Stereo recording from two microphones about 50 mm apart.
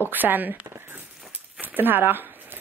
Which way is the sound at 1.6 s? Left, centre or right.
Right.